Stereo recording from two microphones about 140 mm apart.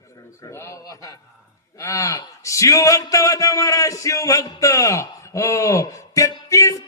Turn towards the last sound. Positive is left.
turn(degrees=25)  # may be behind; listen again after turning